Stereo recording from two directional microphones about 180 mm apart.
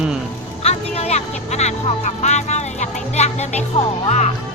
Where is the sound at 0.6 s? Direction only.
35° left (ahead or behind).